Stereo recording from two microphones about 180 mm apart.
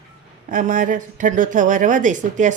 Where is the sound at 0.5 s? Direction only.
45° right (ahead or behind).